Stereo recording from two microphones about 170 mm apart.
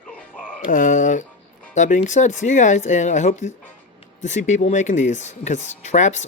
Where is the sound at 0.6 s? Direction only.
50° left (ahead or behind).